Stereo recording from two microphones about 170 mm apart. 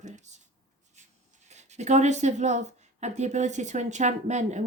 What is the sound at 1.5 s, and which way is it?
Speech, 40° right (ahead or behind).